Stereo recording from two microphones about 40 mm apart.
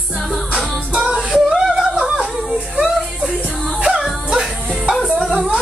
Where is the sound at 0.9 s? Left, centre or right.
Right.